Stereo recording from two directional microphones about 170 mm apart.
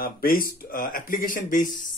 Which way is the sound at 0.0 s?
60° left (ahead or behind).